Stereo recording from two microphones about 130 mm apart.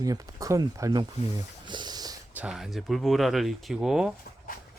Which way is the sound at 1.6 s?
35° right (ahead or behind).